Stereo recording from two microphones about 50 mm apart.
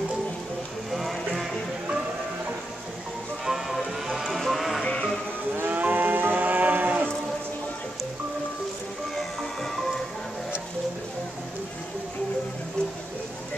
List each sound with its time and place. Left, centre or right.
0.9 s music: centre
3.4 s music: centre
4.8 s music: left
5.6 s moo: right
9.1 s music: centre